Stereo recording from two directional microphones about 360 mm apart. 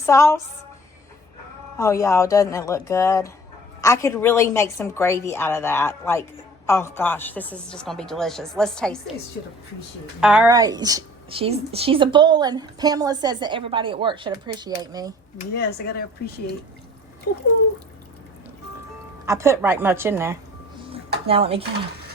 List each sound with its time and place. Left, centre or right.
0.0 s a woman's voice: centre
1.8 s a woman's voice: centre
10.2 s a woman's voice: centre
15.5 s speech: left
19.2 s a woman's voice: centre